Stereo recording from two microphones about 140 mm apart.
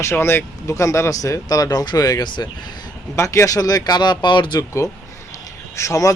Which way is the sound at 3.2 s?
20° left (ahead or behind).